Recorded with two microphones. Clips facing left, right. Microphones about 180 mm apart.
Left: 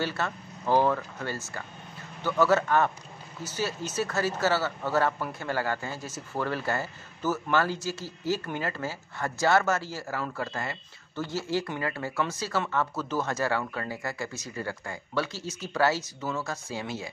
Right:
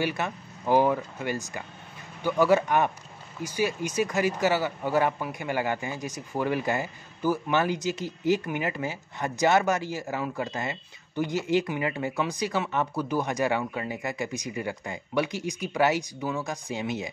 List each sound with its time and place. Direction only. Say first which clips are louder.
0.0 s speech: right 2 dB; 15° right (ahead or behind)